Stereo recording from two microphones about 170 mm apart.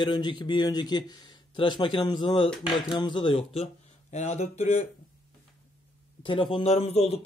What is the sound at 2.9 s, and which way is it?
Speech, 30° left (ahead or behind).